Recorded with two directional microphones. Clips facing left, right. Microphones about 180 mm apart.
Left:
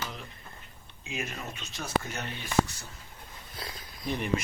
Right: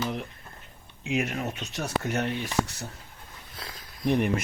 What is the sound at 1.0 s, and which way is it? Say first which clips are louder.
Speech: right 9 dB; 70° right (ahead or behind).